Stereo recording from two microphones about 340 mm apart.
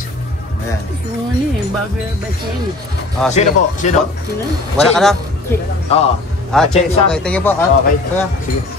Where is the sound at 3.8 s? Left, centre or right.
Left.